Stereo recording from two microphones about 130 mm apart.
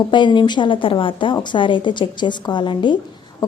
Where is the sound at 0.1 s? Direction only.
35° left (ahead or behind).